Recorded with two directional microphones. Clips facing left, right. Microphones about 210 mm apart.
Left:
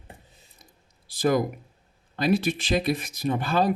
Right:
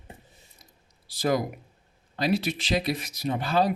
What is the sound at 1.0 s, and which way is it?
Speech, 50° left (ahead or behind).